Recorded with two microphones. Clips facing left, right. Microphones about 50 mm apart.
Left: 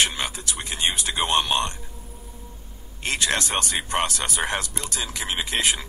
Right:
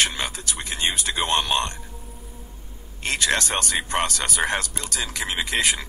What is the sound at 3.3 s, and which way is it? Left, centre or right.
Speech, right.